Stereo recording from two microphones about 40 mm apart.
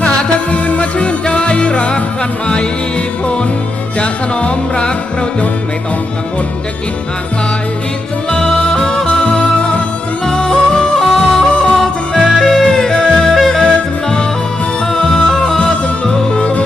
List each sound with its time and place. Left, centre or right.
0.0 s music: left
4.0 s music: left
8.3 s music: centre
10.2 s yodeling: centre
12.4 s music: centre
14.9 s music: centre
15.5 s music: centre
16.4 s music: left